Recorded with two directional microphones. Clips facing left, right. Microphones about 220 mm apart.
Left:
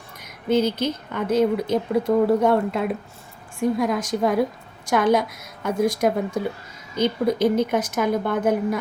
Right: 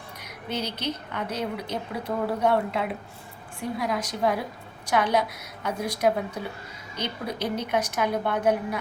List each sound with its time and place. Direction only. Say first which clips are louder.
0.2 s a woman's voice: left 12 dB; 45° left (ahead or behind)